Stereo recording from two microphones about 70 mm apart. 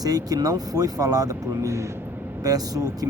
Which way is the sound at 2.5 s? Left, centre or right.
Right.